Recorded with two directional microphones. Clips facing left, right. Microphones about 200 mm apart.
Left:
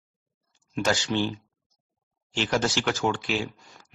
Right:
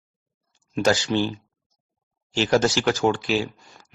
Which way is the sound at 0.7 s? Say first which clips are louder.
Right 5 dB; 35° right (ahead or behind).